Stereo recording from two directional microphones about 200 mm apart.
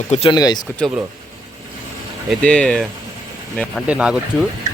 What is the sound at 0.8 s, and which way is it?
Speech, centre (ahead or behind).